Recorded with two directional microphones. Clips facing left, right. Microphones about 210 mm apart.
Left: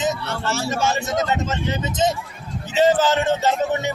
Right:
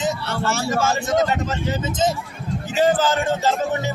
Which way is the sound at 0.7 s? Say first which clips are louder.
Right 2 dB; 20° left (ahead or behind).